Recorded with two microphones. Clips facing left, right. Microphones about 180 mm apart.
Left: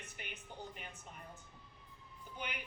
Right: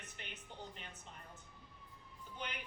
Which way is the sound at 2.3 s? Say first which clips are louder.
Left 1 dB; 10° left (ahead or behind).